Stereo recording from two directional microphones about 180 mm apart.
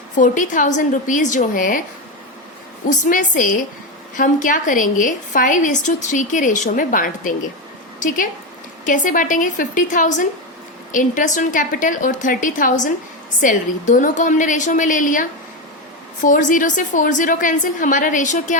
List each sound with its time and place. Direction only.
0.2 s a woman's voice: 45° left (ahead or behind)
2.8 s a woman's voice: 45° left (ahead or behind)